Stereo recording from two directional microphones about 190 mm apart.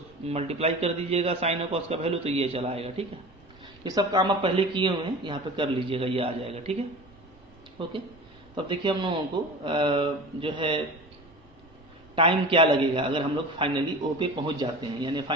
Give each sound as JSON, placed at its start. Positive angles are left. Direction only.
{"t": 0.3, "sound": "a man's voice", "side_deg": -35}
{"t": 3.8, "sound": "a man's voice", "side_deg": -20}
{"t": 12.1, "sound": "a man's voice", "side_deg": -30}